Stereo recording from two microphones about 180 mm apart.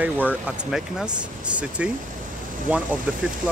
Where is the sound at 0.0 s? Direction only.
10° right (ahead or behind).